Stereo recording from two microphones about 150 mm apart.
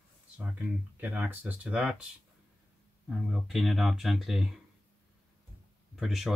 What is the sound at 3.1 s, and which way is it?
Speech, centre (ahead or behind).